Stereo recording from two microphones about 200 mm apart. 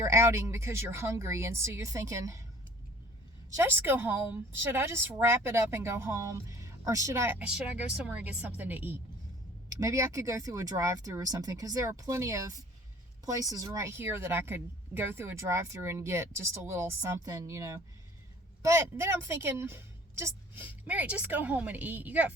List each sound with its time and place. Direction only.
0.0 s speech: 15° right (ahead or behind)
3.5 s speech: 10° right (ahead or behind)